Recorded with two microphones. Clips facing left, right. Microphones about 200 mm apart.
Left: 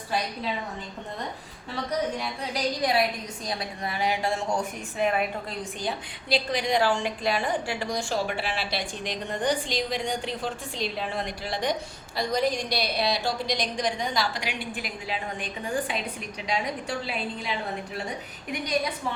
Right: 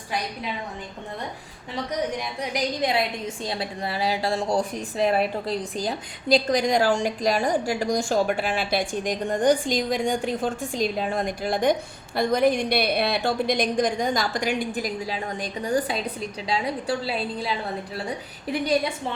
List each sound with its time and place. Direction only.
2.1 s a woman's voice: 20° right (ahead or behind); by 17.5 s 35° right (ahead or behind)
18.5 s a woman's voice: 30° right (ahead or behind)